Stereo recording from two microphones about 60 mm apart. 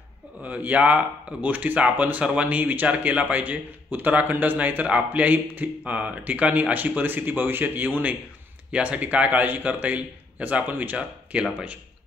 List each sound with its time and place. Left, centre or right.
0.4 s a man's voice: right